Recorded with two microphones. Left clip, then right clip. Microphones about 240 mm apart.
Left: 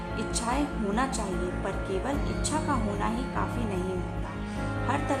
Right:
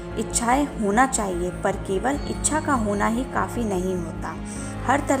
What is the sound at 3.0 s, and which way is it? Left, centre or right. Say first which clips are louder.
Speech: right 7 dB; right.